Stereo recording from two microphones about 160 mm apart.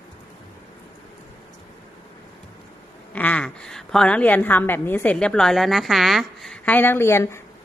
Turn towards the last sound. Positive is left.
turn(degrees=15)  # may be behind; listen again after turning